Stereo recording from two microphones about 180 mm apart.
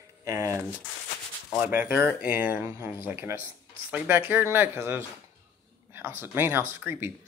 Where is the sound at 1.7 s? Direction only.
10° right (ahead or behind).